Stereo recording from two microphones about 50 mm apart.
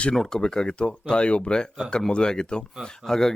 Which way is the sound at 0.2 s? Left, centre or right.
Centre.